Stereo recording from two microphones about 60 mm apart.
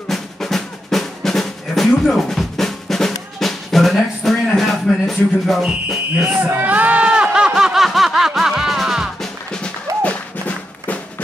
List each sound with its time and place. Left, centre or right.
0.1 s drum: centre
6.2 s speech: centre
6.5 s a sound: right; by 9.1 s centre
9.2 s music: centre